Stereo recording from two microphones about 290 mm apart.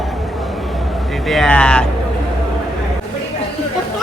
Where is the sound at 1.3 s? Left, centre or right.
Centre.